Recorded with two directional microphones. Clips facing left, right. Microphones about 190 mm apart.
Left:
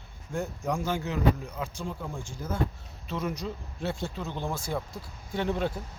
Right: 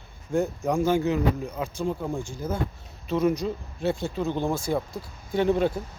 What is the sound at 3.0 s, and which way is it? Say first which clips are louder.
Speech: right 9 dB; 10° right (ahead or behind).